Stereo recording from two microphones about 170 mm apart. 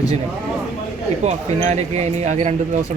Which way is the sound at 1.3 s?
40° right (ahead or behind).